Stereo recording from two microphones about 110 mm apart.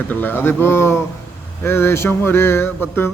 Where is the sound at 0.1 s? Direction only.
20° left (ahead or behind).